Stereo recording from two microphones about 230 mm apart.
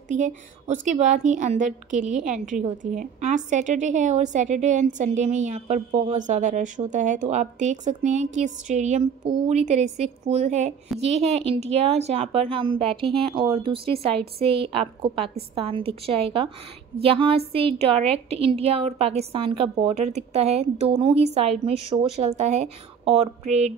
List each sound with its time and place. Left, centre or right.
0.1 s a woman's voice: right